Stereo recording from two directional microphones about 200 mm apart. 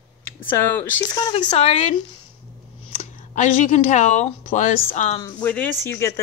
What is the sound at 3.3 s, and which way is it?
A woman's voice, 35° left (ahead or behind).